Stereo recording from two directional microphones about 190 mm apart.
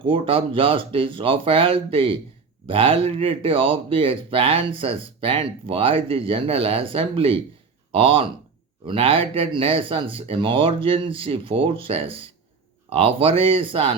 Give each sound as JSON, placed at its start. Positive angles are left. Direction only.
{"t": 0.0, "sound": "speech", "side_deg": -30}